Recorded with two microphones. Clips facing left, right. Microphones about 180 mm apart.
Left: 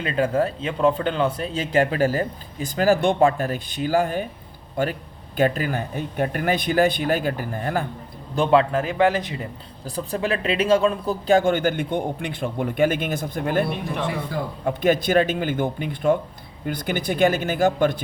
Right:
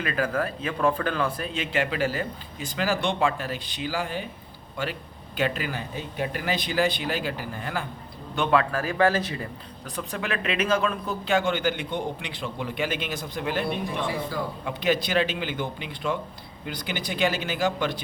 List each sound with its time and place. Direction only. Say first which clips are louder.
0.0 s speech: left 5 dB; 25° left (ahead or behind)
1.5 s speech: left 7 dB; 40° left (ahead or behind)
5.4 s speech: left 6 dB; 45° left (ahead or behind)
8.4 s speech: left 5 dB; 25° left (ahead or behind)
9.8 s speech: left 6 dB; 35° left (ahead or behind); by 18.0 s 50° left (ahead or behind)